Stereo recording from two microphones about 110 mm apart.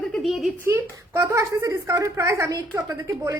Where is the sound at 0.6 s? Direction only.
25° right (ahead or behind).